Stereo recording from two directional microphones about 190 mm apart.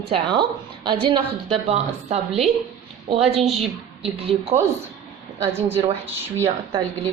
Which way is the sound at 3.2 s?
35° right (ahead or behind).